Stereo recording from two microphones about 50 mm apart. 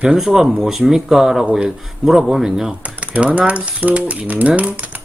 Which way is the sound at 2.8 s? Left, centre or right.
Right.